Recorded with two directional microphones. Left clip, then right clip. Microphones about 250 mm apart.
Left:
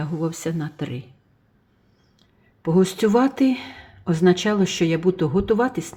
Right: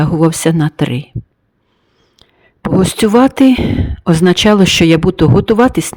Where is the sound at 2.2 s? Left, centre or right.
Right.